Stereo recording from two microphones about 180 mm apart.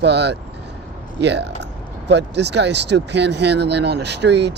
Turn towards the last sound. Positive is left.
turn(degrees=-70)  # may be behind; listen again after turning